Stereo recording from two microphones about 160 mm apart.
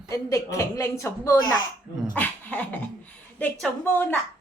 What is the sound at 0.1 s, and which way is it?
A woman's voice, 20° left (ahead or behind).